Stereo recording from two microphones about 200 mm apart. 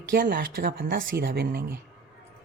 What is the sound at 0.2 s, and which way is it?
A woman's voice, 45° right (ahead or behind).